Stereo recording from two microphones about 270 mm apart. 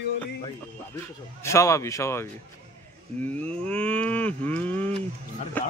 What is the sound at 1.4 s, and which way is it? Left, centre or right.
Speech, centre.